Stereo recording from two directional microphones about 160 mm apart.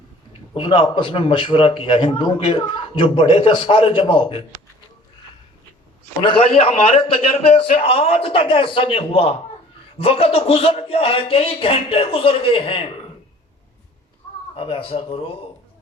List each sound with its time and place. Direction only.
0.5 s a man's voice: 35° left (ahead or behind)
6.2 s a man's voice: 35° left (ahead or behind)
14.5 s a man's voice: 35° left (ahead or behind)